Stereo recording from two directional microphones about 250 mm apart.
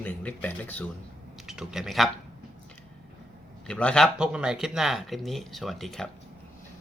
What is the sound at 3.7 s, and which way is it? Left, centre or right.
Speech, centre.